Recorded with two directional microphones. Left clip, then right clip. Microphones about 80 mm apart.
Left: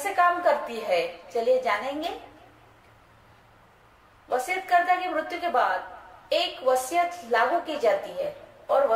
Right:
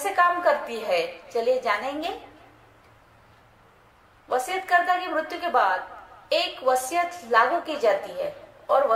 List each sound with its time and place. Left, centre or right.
0.0 s a woman's voice: right
4.3 s a woman's voice: right